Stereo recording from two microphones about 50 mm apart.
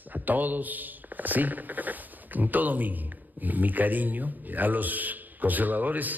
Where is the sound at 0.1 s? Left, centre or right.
Right.